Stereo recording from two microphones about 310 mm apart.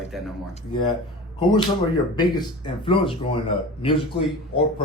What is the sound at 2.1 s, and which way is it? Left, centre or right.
Speech, centre.